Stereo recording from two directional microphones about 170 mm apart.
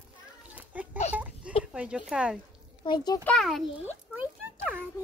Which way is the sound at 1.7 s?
5° right (ahead or behind).